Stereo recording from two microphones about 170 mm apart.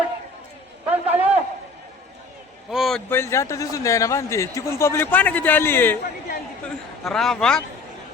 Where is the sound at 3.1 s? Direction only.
15° left (ahead or behind).